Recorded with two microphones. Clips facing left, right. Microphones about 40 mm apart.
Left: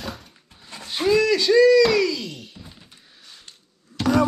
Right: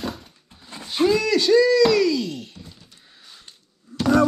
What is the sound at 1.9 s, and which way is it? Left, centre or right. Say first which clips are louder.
Music: right 2 dB; centre.